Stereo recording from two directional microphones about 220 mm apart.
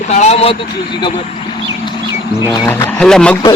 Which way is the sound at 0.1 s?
30° left (ahead or behind).